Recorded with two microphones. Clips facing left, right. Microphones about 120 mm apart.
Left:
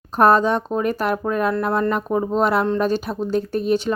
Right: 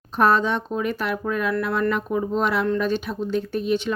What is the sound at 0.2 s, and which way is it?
Speech, 40° left (ahead or behind).